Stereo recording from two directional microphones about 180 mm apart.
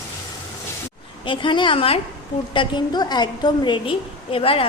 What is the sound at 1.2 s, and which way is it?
A woman's voice, 25° left (ahead or behind).